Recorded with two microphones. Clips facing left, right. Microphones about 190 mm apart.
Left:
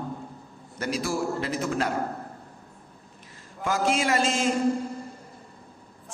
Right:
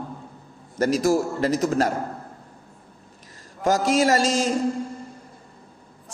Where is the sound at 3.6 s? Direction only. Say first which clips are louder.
Right 5 dB; 40° right (ahead or behind).